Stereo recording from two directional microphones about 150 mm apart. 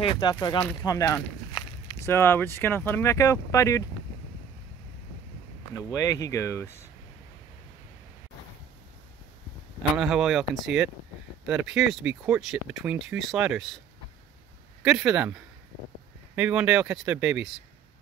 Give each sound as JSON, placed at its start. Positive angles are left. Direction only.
{"t": 0.0, "sound": "speech", "side_deg": 30}
{"t": 5.9, "sound": "speech", "side_deg": 20}
{"t": 9.9, "sound": "speech", "side_deg": 0}
{"t": 14.8, "sound": "speech", "side_deg": -5}
{"t": 16.3, "sound": "speech", "side_deg": -10}